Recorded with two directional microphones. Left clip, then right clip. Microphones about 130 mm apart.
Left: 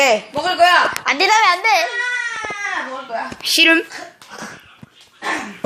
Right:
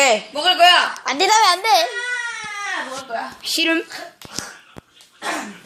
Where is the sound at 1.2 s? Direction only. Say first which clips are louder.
Left 1 dB; 50° right (ahead or behind).